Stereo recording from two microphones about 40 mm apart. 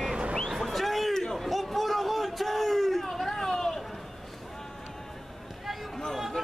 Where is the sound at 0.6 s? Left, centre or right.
Centre.